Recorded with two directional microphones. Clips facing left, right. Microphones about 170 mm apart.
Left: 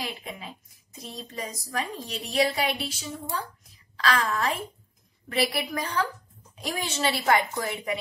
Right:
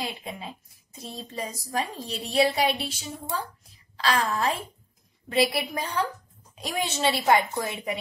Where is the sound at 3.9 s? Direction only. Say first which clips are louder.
Even; 30° right (ahead or behind).